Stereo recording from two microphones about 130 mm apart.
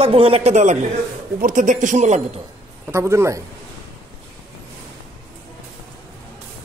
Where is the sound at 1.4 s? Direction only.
85° right; by 2.2 s 65° right (ahead or behind).